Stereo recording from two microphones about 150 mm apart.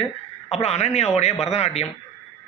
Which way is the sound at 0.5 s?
45° left (ahead or behind).